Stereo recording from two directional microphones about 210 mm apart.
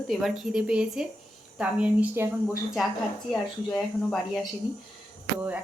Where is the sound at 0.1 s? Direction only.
Centre (ahead or behind).